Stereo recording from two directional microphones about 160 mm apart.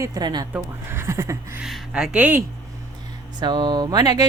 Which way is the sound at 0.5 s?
15° right (ahead or behind).